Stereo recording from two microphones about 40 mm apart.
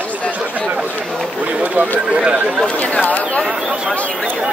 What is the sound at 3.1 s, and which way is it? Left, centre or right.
Speech, left.